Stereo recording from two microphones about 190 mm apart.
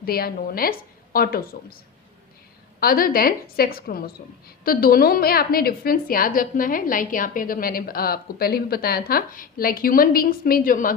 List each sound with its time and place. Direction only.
0.0 s a woman's voice: 55° left (ahead or behind)
2.8 s a woman's voice: 50° left (ahead or behind)